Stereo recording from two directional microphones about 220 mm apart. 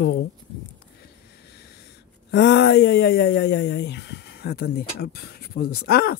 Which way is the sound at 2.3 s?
50° left (ahead or behind).